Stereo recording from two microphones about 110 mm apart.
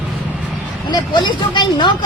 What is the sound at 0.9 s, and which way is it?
Speech, 40° left (ahead or behind).